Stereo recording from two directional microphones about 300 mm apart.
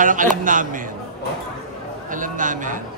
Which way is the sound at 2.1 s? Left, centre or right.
Right.